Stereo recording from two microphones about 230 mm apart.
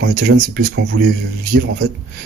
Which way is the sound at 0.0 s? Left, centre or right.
Right.